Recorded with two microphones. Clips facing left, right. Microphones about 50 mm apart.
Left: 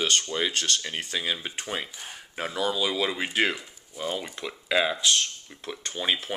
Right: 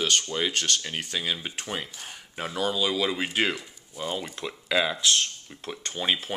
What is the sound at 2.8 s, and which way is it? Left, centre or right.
Speech, centre.